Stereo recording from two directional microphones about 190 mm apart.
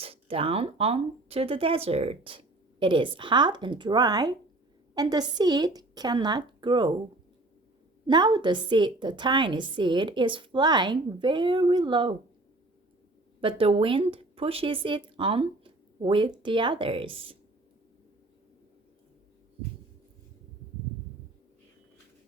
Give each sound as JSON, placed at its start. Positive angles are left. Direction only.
{"t": 0.0, "sound": "speech", "side_deg": -30}
{"t": 8.0, "sound": "speech", "side_deg": -25}
{"t": 13.4, "sound": "speech", "side_deg": -30}